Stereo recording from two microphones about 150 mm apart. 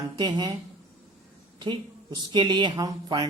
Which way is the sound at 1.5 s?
30° right (ahead or behind).